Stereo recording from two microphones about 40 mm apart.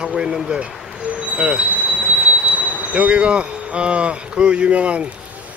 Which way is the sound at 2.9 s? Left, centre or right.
Right.